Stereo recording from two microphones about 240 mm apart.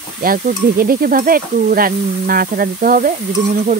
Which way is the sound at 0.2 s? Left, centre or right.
Right.